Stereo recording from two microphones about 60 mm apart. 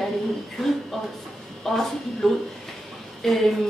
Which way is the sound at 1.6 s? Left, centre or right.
Centre.